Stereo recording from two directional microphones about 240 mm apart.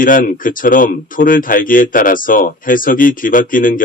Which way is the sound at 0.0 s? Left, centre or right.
Left.